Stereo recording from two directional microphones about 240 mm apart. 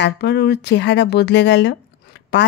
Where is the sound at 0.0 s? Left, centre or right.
Left.